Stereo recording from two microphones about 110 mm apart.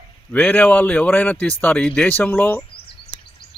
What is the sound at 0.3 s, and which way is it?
Speech, 15° left (ahead or behind).